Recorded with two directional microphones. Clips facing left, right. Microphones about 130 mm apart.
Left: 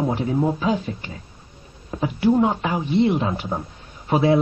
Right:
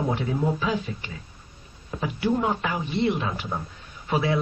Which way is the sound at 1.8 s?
25° left (ahead or behind).